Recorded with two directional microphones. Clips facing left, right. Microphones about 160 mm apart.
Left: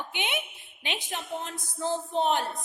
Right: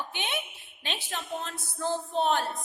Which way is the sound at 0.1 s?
20° left (ahead or behind).